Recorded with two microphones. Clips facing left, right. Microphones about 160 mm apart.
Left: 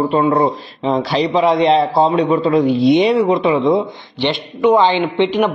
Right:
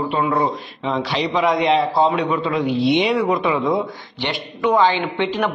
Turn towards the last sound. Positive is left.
turn(degrees=20)  # may be behind; listen again after turning